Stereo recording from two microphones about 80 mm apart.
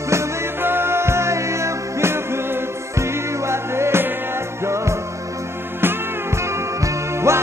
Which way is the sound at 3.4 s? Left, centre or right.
Right.